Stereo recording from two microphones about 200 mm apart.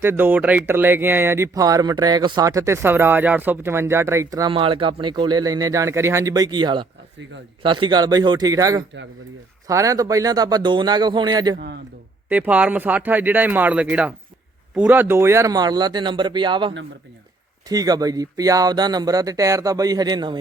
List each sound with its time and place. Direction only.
0.0 s speech: 10° right (ahead or behind)
11.5 s a man's voice: 55° right (ahead or behind)
12.3 s speech: 10° right (ahead or behind)